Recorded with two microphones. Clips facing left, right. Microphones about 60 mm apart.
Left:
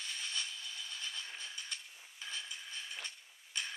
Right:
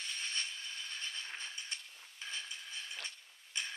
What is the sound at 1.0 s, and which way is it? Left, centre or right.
Train, right.